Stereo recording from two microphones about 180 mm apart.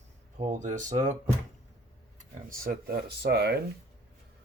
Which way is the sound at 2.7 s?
60° right (ahead or behind).